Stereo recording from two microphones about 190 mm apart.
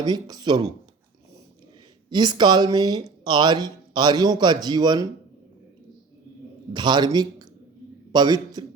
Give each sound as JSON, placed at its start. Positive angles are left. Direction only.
{"t": 0.0, "sound": "speech", "side_deg": -20}
{"t": 2.0, "sound": "speech", "side_deg": -25}
{"t": 6.7, "sound": "speech", "side_deg": -25}